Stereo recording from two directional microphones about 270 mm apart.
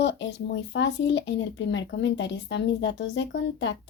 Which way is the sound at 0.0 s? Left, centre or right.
Left.